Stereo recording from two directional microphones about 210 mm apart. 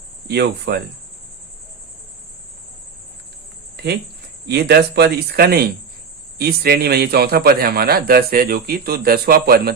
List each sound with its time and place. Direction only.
0.3 s a man's voice: 50° right (ahead or behind)
4.4 s a man's voice: 50° right (ahead or behind)